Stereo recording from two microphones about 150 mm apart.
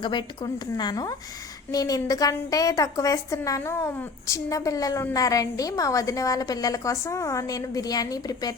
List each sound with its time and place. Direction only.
0.0 s a woman's voice: 30° left (ahead or behind)